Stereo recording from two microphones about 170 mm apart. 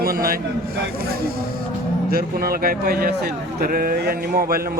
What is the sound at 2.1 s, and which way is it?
A man's voice, 60° right (ahead or behind).